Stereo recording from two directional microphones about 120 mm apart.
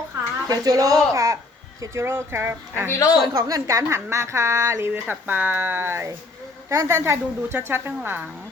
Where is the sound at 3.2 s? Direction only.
35° right (ahead or behind); by 8.3 s 15° right (ahead or behind).